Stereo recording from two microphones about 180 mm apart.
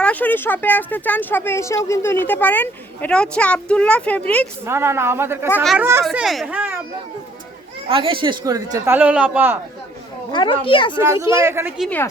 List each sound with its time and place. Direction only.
0.0 s speech: 10° left (ahead or behind)
4.6 s speech: 15° right (ahead or behind)
6.1 s speech: centre (ahead or behind)
7.9 s speech: 30° right (ahead or behind)
9.0 s speech: 5° right (ahead or behind)
10.3 s a child's voice: 30° left (ahead or behind)
11.0 s speech: 15° right (ahead or behind)
11.8 s speech: 10° left (ahead or behind)